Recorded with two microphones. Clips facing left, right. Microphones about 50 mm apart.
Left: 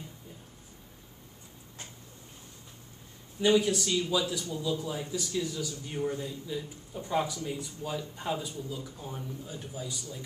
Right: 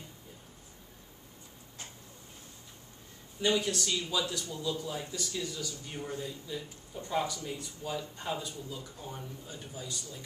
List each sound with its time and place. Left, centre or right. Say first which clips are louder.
3.3 s a man's voice: left 5 dB; centre